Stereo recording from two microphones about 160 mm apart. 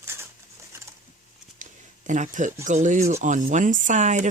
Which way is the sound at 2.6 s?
50° right (ahead or behind).